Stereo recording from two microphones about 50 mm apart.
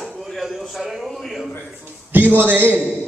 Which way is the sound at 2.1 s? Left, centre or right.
Right.